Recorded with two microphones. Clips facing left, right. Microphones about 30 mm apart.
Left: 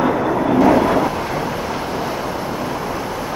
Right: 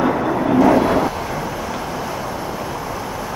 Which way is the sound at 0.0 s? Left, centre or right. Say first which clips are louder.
Left 1 dB; centre.